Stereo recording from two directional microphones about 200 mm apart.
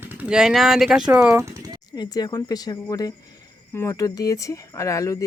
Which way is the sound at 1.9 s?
20° left (ahead or behind).